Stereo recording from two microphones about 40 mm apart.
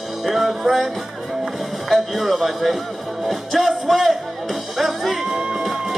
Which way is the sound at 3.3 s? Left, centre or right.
Centre.